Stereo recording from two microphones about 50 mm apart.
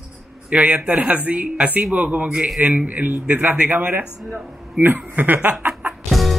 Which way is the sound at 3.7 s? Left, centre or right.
Right.